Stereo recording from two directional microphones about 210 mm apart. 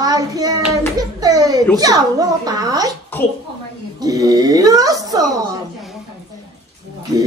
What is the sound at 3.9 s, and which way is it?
A woman's voice, 15° right (ahead or behind).